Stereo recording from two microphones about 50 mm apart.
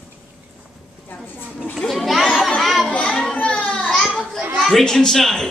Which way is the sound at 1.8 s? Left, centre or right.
Centre.